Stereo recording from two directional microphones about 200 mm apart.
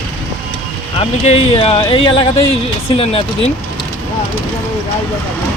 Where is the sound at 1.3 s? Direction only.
30° left (ahead or behind).